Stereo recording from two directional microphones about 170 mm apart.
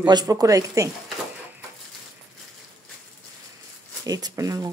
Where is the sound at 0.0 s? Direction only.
25° right (ahead or behind).